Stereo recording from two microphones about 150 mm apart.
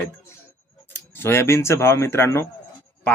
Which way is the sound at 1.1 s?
15° left (ahead or behind).